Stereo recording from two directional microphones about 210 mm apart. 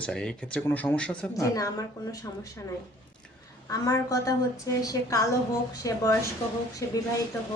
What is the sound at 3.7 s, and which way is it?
Speech, 15° left (ahead or behind).